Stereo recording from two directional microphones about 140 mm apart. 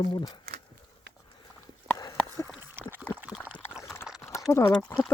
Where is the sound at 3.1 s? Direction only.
10° right (ahead or behind).